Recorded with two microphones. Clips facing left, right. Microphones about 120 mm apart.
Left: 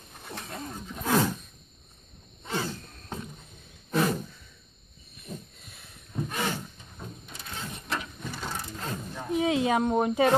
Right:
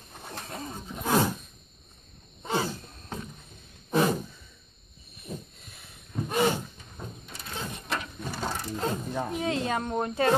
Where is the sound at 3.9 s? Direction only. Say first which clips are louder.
Right 2 dB; 20° right (ahead or behind).